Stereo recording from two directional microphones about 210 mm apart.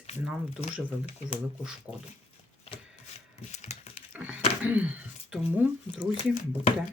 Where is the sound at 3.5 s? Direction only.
30° left (ahead or behind).